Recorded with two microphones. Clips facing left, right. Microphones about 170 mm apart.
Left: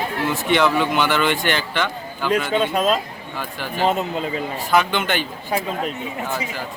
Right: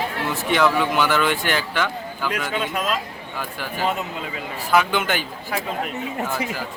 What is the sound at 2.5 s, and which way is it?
Speech, 30° left (ahead or behind).